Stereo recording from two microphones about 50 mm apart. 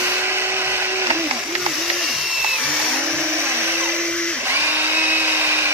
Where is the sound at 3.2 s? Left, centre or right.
Right.